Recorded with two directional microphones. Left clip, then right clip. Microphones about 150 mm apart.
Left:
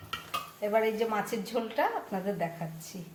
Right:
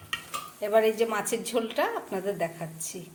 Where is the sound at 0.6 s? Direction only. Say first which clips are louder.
Right 5 dB; 60° right (ahead or behind).